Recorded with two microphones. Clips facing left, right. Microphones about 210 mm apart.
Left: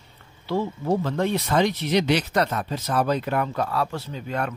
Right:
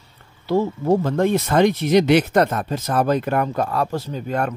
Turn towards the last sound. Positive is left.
turn(degrees=-45)  # may be behind; listen again after turning